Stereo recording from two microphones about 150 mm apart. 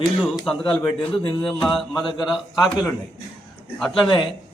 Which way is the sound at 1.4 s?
Centre (ahead or behind).